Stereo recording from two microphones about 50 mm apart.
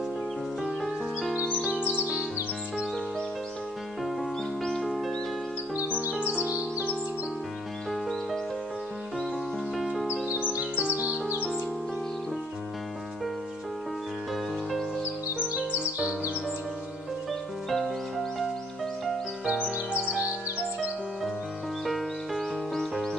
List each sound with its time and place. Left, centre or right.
4.8 s music: centre
6.1 s music: right
7.9 s music: centre
10.3 s music: right
14.3 s music: centre
17.3 s music: centre
19.6 s music: right
21.8 s music: centre